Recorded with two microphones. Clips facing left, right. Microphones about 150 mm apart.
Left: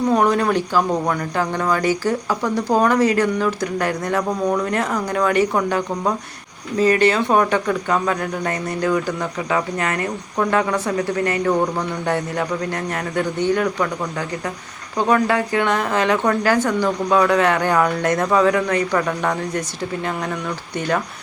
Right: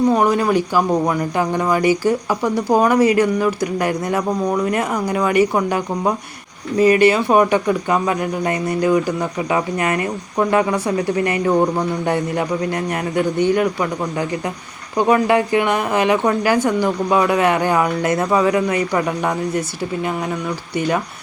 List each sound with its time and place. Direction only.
0.1 s speech: 5° right (ahead or behind)
20.7 s speech: 10° right (ahead or behind)